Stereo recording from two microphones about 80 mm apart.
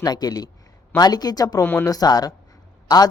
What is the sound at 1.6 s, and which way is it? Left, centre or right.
Speech, left.